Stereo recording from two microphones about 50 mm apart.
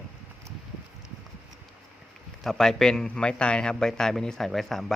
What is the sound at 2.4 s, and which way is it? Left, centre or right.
A man's voice, centre.